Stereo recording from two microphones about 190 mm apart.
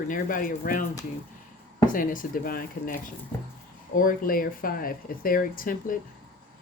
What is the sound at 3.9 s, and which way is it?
Speech, 45° left (ahead or behind).